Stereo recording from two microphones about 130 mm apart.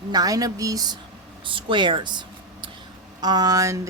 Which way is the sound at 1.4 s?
40° right (ahead or behind).